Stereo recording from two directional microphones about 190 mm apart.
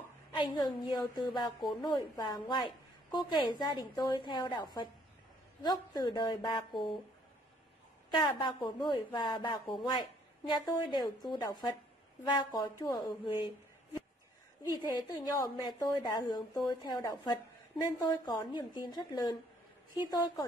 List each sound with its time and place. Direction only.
0.4 s a woman's voice: 25° left (ahead or behind)
1.6 s speech: centre (ahead or behind)
1.9 s a woman's voice: 20° left (ahead or behind)
8.1 s a woman's voice: 25° left (ahead or behind)
15.0 s a woman's voice: 20° left (ahead or behind)